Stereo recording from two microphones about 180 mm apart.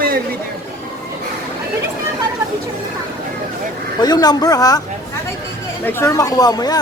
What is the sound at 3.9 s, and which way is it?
Speech, 20° left (ahead or behind).